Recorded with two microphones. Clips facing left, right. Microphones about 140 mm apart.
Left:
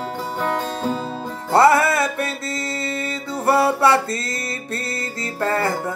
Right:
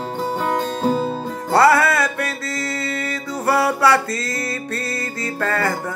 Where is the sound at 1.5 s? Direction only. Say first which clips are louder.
Even; 25° left (ahead or behind).